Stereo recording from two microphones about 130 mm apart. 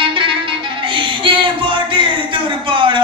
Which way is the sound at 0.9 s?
40° right (ahead or behind).